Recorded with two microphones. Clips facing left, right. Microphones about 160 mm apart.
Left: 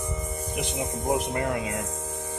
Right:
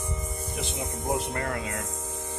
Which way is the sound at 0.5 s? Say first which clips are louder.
Left 4 dB; 20° left (ahead or behind).